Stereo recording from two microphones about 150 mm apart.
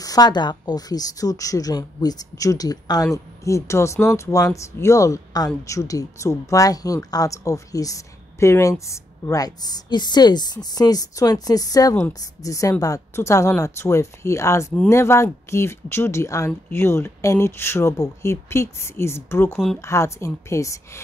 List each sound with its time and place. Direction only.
0.0 s speech: 25° left (ahead or behind)